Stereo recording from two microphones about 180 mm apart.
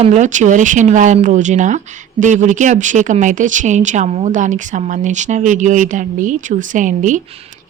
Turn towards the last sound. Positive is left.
turn(degrees=-45)  # may be behind; listen again after turning